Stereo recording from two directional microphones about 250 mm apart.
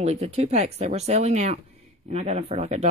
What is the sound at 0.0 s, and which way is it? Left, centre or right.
Speech, right.